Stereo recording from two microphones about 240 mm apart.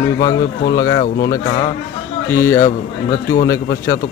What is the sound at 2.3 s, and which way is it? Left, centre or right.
Speech, centre.